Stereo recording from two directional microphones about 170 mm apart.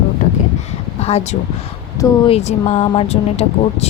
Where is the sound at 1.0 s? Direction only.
40° left (ahead or behind).